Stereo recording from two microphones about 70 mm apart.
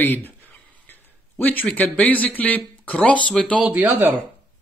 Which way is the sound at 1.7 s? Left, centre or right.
Left.